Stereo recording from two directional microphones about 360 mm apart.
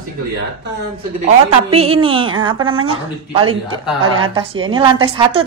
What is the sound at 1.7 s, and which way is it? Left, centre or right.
Speech, centre.